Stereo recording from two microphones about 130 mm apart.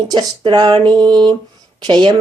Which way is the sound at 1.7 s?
35° right (ahead or behind).